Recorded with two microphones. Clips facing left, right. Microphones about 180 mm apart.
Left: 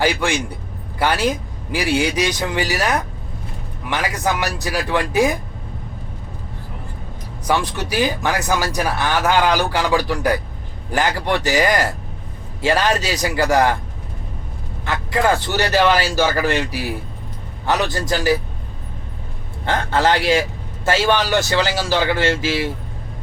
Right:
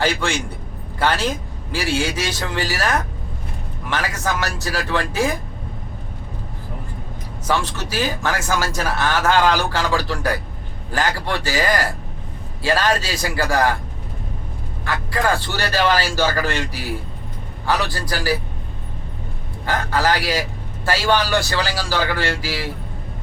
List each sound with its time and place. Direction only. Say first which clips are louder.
0.0 s speech: left 2 dB; 15° left (ahead or behind)
7.4 s a man's voice: left 2 dB; 15° left (ahead or behind)
14.8 s a man's voice: left 3 dB; 20° left (ahead or behind)
19.6 s a man's voice: left 2 dB; 25° left (ahead or behind)